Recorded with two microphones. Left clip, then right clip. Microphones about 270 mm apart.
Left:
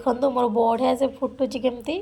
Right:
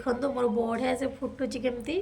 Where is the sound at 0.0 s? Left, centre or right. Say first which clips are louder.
Left 6 dB; centre.